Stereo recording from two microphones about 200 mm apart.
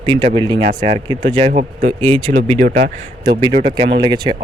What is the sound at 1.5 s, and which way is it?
Speech, 40° right (ahead or behind).